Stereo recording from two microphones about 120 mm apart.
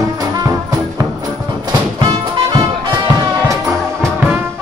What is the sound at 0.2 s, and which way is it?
Music, 30° right (ahead or behind).